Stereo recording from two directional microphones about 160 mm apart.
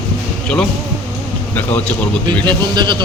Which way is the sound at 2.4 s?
30° right (ahead or behind).